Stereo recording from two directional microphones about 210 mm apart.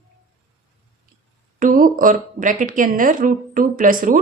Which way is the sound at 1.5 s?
40° right (ahead or behind).